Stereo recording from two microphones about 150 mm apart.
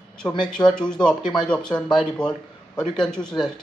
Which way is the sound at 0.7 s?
5° left (ahead or behind).